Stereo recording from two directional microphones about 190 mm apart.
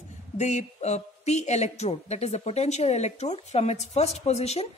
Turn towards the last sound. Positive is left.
turn(degrees=35)  # may be behind; listen again after turning